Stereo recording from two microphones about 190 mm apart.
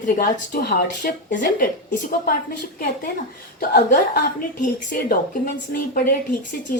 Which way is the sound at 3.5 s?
50° left (ahead or behind).